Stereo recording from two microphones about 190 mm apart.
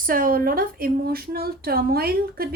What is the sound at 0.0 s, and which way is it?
A woman's voice, 50° right (ahead or behind).